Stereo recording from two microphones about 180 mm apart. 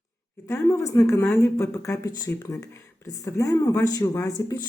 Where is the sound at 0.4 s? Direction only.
15° left (ahead or behind).